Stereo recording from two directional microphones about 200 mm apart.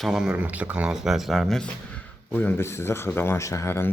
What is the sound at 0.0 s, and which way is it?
Speech, 5° right (ahead or behind).